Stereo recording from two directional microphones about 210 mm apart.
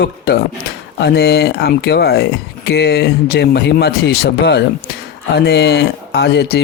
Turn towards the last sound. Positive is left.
turn(degrees=55)  # may be behind; listen again after turning